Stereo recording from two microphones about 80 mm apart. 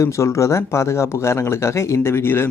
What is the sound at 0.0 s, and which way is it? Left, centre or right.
Speech, left.